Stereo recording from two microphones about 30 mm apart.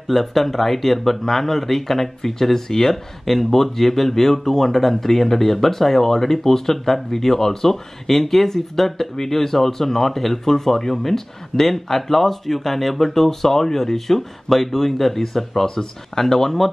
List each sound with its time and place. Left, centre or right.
0.1 s speech: centre